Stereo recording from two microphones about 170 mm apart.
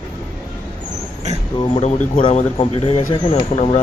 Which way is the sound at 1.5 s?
30° left (ahead or behind).